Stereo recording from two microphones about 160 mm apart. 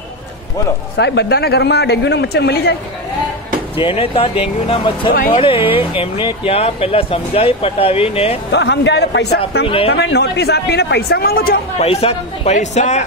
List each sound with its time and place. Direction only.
0.9 s a man's voice: 90° left
3.7 s speech: 35° left (ahead or behind)
5.1 s speech: 65° left (ahead or behind)
5.4 s speech: 35° left (ahead or behind)
8.5 s a man's voice: 90° left; by 11.6 s 70° left (ahead or behind)
11.8 s a man's voice: 40° left (ahead or behind)